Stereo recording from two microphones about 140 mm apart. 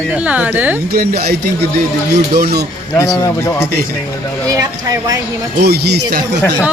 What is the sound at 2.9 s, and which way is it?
Speech, 25° left (ahead or behind).